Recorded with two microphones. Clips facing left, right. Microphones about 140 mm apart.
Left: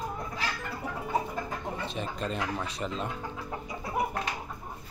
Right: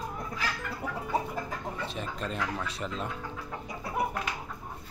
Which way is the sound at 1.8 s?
Centre (ahead or behind).